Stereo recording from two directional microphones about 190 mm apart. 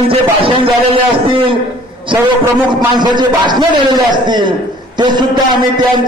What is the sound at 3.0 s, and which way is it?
A man's voice, 25° right (ahead or behind).